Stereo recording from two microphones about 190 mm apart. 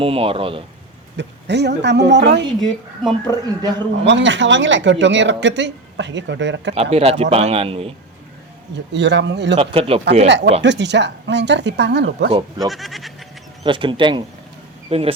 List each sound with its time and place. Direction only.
0.0 s speech: 30° right (ahead or behind)
1.1 s speech: 65° right (ahead or behind)
2.6 s speech: centre (ahead or behind)
4.0 s speech: 70° right (ahead or behind)
6.9 s speech: 35° right (ahead or behind)
8.7 s speech: 65° right (ahead or behind)
9.6 s speech: 30° right (ahead or behind)
10.2 s speech: 65° right (ahead or behind)
12.3 s speech: 20° right (ahead or behind)
12.7 s speech: centre (ahead or behind)
13.7 s speech: 25° right (ahead or behind)